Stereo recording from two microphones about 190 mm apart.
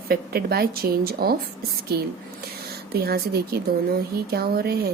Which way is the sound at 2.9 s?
55° right (ahead or behind).